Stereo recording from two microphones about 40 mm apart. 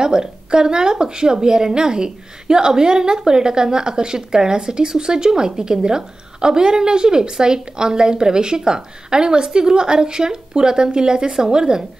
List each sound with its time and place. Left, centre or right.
0.0 s a woman's voice: centre